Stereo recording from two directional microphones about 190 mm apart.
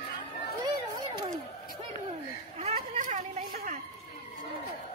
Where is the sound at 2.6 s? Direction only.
40° right (ahead or behind).